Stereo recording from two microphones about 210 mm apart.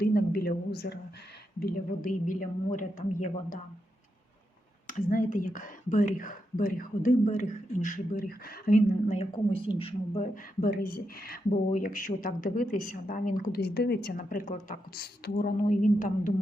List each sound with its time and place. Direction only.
0.0 s a woman's voice: 45° left (ahead or behind)
4.9 s speech: 40° left (ahead or behind)
10.3 s speech: 40° left (ahead or behind)